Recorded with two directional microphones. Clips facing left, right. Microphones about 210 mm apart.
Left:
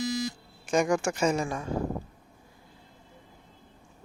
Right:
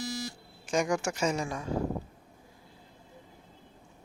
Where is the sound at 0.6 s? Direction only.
55° left (ahead or behind).